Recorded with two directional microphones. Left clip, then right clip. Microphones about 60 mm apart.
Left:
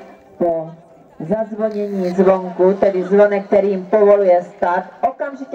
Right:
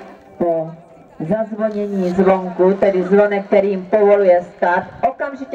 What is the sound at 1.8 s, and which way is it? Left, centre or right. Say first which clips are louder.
Speech: even; left.